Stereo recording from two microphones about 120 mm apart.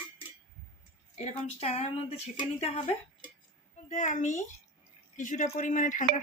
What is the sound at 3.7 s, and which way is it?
A child's voice, 85° left.